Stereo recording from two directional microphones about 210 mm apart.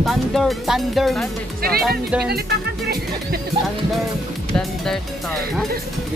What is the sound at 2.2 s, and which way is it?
Speech, 50° right (ahead or behind).